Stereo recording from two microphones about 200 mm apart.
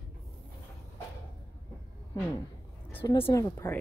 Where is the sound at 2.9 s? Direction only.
10° left (ahead or behind).